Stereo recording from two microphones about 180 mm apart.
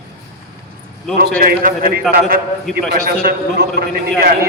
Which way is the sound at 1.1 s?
55° right (ahead or behind).